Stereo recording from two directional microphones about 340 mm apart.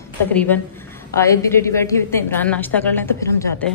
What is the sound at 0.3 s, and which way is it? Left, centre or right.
A woman's voice, centre.